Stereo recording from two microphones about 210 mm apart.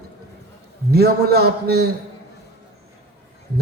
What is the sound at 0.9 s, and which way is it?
Speech, 50° right (ahead or behind).